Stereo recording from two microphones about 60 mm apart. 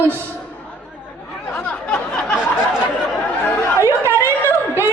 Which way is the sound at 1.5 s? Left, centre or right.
Centre.